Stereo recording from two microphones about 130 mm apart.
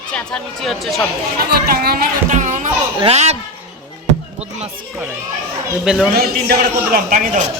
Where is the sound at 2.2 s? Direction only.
75° right (ahead or behind).